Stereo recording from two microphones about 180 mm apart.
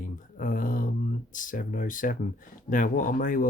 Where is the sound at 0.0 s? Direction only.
45° left (ahead or behind).